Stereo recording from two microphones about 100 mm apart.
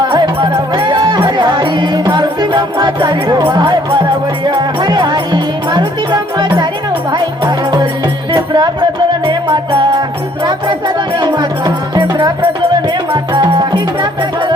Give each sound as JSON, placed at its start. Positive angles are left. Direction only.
{"t": 0.8, "sound": "music", "side_deg": -50}
{"t": 3.5, "sound": "speech", "side_deg": -50}
{"t": 4.4, "sound": "music", "side_deg": -50}
{"t": 9.2, "sound": "music", "side_deg": -55}
{"t": 13.3, "sound": "music", "side_deg": -45}